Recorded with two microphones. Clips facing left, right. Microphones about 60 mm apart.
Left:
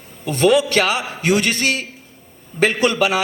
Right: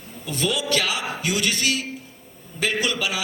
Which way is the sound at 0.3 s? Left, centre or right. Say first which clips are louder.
Left 9 dB; left.